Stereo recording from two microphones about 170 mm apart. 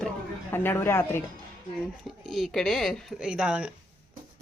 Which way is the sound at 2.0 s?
Centre (ahead or behind).